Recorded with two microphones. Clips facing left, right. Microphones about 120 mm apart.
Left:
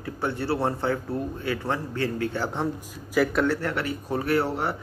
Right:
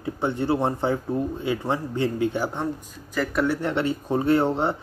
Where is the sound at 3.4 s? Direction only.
20° right (ahead or behind).